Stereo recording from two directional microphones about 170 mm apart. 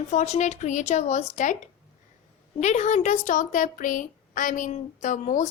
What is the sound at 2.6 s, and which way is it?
Speech, 40° left (ahead or behind).